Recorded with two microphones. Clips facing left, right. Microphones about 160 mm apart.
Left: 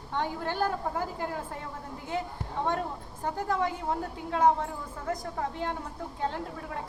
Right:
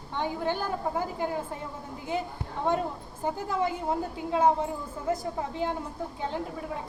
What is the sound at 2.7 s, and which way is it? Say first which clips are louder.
A woman's voice: right 7 dB; 5° right (ahead or behind).